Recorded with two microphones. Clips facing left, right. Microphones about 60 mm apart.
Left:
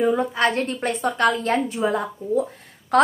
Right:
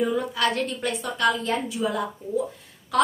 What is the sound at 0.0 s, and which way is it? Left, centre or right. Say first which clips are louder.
A woman's voice: left 4 dB; left.